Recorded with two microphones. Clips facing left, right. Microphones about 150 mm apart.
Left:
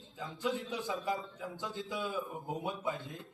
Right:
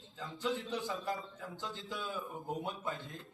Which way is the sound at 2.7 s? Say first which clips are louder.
Left 3 dB; 20° left (ahead or behind).